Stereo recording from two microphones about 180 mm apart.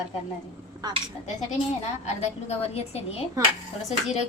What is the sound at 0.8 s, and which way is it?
Speech, 20° right (ahead or behind).